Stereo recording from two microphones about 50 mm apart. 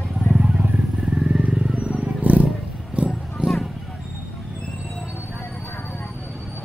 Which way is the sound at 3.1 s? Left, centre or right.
Centre.